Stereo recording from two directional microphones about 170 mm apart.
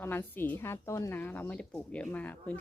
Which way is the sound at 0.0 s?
15° left (ahead or behind).